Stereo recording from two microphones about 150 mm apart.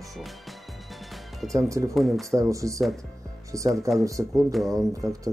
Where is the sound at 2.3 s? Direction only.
20° right (ahead or behind).